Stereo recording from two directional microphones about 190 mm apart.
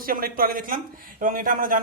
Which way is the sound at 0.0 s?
50° right (ahead or behind).